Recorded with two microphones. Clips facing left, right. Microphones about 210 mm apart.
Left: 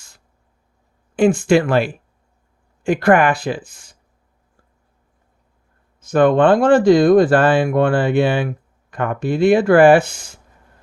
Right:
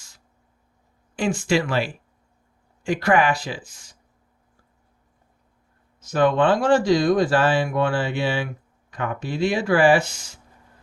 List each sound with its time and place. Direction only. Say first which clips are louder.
1.1 s speech: left 8 dB; 55° left (ahead or behind)
6.0 s speech: left 6 dB; 55° left (ahead or behind)